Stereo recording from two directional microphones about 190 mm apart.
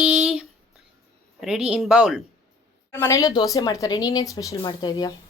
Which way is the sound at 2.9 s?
15° left (ahead or behind).